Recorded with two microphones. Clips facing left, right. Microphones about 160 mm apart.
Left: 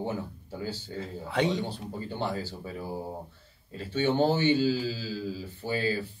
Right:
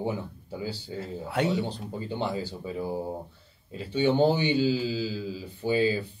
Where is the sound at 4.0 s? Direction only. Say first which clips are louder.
Right 2 dB; 15° right (ahead or behind).